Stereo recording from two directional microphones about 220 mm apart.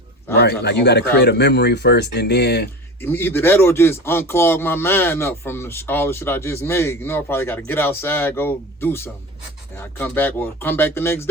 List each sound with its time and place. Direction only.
0.4 s speech: 50° left (ahead or behind)
3.0 s speech: 10° left (ahead or behind)